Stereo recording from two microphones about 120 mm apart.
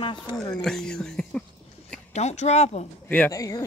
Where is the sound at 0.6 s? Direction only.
5° left (ahead or behind).